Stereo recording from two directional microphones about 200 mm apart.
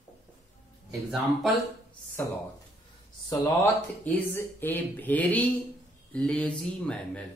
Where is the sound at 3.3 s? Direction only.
15° left (ahead or behind).